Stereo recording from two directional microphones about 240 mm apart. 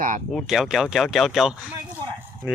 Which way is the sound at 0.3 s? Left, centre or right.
Centre.